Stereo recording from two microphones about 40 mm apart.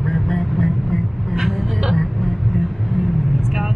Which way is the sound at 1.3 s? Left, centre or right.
Centre.